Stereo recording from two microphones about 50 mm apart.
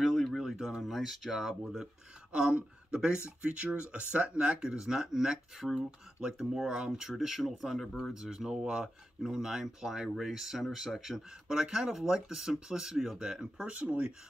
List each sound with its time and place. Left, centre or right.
0.0 s a sound: centre
0.4 s speech: centre
2.3 s speech: centre
8.1 s speech: centre
13.7 s speech: right